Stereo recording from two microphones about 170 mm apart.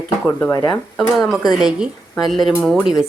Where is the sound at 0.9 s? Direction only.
Centre (ahead or behind).